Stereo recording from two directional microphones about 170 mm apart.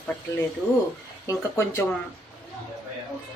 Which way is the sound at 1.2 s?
15° left (ahead or behind).